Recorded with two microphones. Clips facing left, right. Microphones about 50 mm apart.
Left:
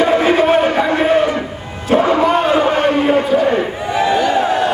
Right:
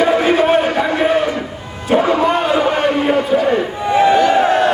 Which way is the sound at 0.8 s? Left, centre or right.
Centre.